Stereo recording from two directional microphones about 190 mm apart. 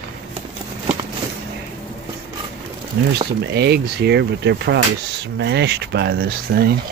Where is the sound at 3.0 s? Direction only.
60° right (ahead or behind).